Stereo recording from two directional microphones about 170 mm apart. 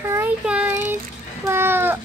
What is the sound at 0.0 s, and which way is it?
Child singing, 10° right (ahead or behind).